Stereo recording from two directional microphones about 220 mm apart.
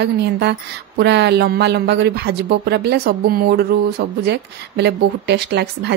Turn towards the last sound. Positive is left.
turn(degrees=-50)  # may be behind; listen again after turning